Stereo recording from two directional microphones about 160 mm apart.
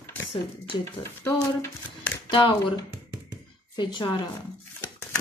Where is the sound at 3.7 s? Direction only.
30° left (ahead or behind).